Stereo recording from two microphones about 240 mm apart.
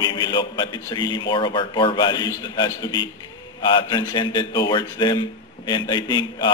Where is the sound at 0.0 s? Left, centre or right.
Centre.